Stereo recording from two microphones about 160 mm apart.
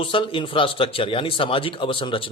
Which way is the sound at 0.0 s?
35° left (ahead or behind).